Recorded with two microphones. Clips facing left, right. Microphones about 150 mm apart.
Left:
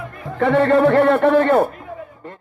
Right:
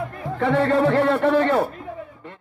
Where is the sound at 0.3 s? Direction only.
60° left (ahead or behind).